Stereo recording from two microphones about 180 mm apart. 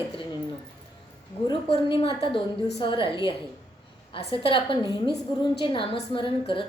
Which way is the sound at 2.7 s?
30° left (ahead or behind).